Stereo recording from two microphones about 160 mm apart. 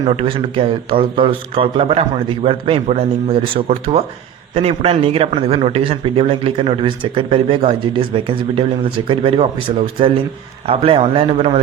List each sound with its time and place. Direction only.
0.0 s a man's voice: 35° right (ahead or behind)